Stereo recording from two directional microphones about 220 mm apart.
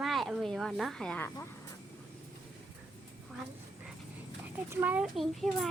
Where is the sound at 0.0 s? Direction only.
Centre (ahead or behind).